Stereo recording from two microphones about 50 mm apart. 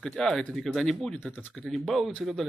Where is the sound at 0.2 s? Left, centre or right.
Centre.